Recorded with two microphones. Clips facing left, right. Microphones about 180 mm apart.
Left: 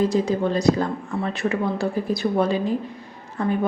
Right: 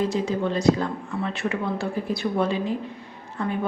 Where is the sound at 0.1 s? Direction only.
40° left (ahead or behind).